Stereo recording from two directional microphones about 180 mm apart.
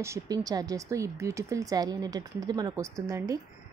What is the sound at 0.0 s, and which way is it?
A woman's voice, 15° right (ahead or behind).